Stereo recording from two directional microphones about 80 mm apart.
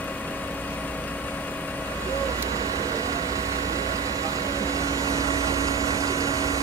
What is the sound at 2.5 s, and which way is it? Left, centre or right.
Vehicle, right.